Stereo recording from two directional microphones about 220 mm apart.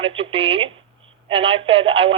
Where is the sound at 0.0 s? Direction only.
25° right (ahead or behind).